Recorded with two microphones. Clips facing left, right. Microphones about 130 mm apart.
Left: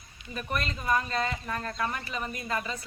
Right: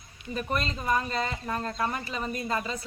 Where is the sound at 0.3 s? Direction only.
25° right (ahead or behind).